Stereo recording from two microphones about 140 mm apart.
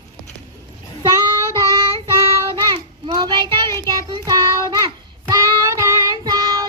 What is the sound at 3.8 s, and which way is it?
Child singing, 25° right (ahead or behind).